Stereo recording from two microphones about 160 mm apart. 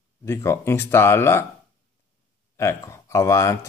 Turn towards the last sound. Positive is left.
turn(degrees=20)  # may be behind; listen again after turning